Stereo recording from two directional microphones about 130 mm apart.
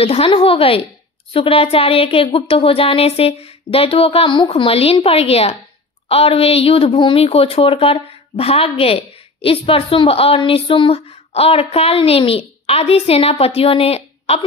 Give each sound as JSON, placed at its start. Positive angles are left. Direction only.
{"t": 0.0, "sound": "speech", "side_deg": 50}